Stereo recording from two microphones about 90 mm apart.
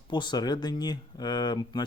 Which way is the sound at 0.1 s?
55° left (ahead or behind).